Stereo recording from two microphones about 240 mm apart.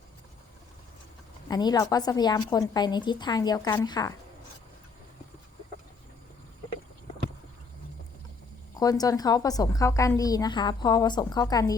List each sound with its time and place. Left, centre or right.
1.5 s a woman's voice: centre
8.8 s a woman's voice: centre